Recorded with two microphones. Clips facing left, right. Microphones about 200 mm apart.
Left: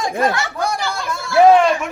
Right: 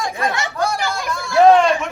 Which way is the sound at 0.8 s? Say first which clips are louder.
Right 1 dB; 15° right (ahead or behind).